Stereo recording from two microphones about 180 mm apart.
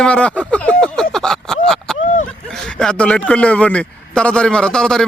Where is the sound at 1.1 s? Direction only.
5° left (ahead or behind).